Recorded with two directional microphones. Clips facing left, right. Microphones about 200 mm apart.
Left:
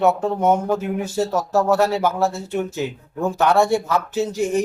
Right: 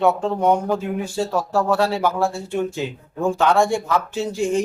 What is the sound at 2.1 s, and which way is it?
Speech, 10° right (ahead or behind).